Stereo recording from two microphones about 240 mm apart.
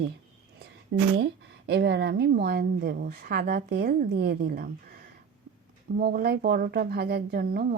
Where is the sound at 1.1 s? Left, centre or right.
Right.